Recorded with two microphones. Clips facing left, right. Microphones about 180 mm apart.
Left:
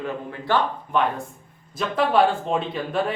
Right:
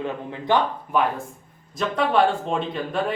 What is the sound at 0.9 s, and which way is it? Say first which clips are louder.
Speech: even; 5° right (ahead or behind).